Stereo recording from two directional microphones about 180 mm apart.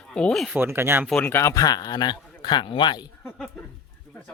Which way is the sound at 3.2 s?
5° left (ahead or behind).